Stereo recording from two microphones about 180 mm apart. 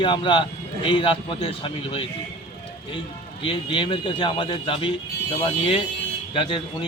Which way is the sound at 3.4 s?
30° left (ahead or behind).